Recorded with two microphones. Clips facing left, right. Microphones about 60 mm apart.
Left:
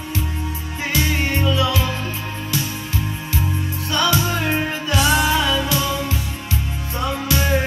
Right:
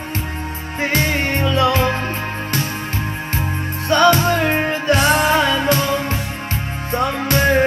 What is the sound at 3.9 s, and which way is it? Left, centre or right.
Music, right.